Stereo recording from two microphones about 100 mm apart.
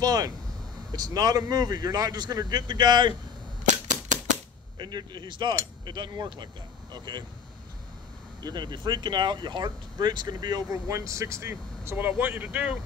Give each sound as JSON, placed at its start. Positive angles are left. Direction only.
{"t": 0.0, "sound": "a man's voice", "side_deg": -40}
{"t": 4.7, "sound": "speech", "side_deg": -50}
{"t": 8.5, "sound": "speech", "side_deg": -45}
{"t": 10.9, "sound": "speech", "side_deg": -30}